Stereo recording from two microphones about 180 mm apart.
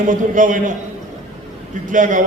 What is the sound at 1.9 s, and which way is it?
Speech, 45° right (ahead or behind).